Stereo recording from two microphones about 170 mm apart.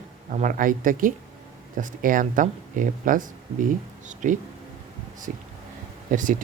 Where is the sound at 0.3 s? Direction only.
50° right (ahead or behind).